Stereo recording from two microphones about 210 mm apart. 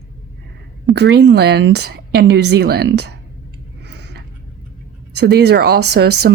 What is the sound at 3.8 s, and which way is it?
Tick-tock, 55° right (ahead or behind).